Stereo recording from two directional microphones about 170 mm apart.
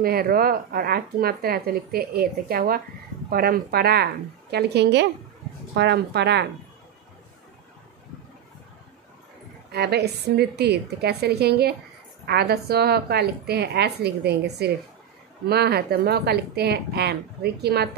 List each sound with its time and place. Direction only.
0.0 s a woman's voice: 60° right (ahead or behind); by 6.4 s 80° right
9.7 s a woman's voice: 75° right (ahead or behind)